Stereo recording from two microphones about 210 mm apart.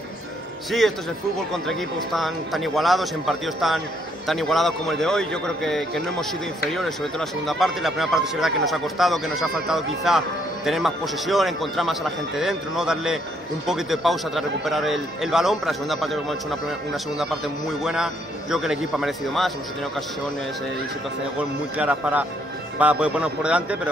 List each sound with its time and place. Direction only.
0.7 s speech: centre (ahead or behind)
21.4 s speech: 5° right (ahead or behind)